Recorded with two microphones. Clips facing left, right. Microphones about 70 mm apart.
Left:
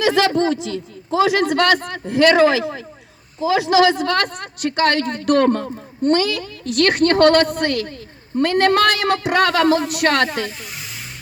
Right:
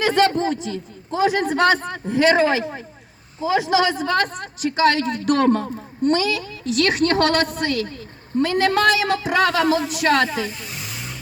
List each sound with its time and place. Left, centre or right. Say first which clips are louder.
0.0 s a man's voice: left 2 dB; left